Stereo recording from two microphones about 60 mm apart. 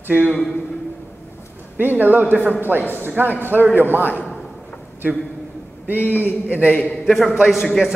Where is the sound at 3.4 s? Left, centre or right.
Right.